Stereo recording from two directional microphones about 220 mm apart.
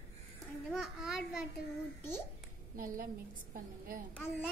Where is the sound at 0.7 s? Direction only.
5° right (ahead or behind).